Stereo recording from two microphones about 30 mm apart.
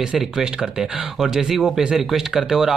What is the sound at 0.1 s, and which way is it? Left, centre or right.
Speech, right.